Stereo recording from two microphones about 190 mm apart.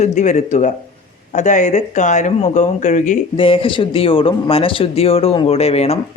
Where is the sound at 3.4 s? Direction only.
30° left (ahead or behind).